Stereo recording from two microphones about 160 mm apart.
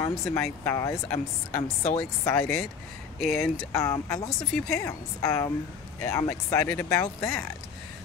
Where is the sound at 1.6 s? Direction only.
40° left (ahead or behind).